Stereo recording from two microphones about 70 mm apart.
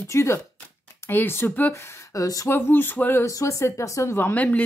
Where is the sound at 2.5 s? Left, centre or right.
Left.